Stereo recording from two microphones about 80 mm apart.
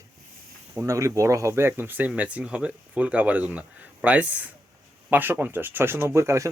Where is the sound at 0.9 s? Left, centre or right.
Right.